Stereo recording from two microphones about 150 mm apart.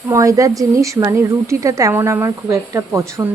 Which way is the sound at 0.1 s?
20° right (ahead or behind).